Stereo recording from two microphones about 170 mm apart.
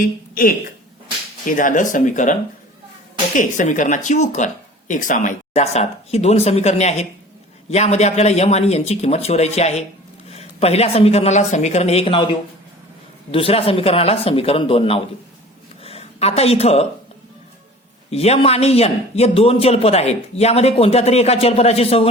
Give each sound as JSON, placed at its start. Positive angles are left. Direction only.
{"t": 0.0, "sound": "a woman's voice", "side_deg": 55}
{"t": 3.3, "sound": "a man's voice", "side_deg": 50}
{"t": 13.3, "sound": "a man's voice", "side_deg": 35}
{"t": 15.8, "sound": "a sound", "side_deg": 35}
{"t": 18.1, "sound": "a man's voice", "side_deg": 40}